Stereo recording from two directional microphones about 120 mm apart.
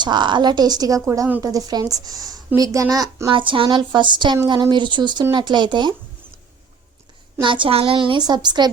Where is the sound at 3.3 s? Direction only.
45° right (ahead or behind).